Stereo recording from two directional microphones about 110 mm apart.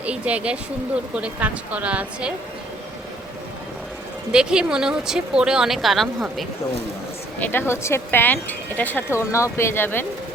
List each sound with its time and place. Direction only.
0.0 s speech: 10° right (ahead or behind)
4.3 s speech: 10° right (ahead or behind)
7.3 s speech: 15° left (ahead or behind)